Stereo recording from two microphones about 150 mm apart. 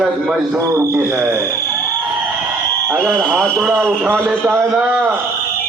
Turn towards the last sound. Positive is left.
turn(degrees=-10)  # may be behind; listen again after turning